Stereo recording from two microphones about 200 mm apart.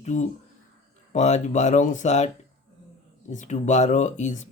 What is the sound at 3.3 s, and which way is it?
Speech, 35° left (ahead or behind).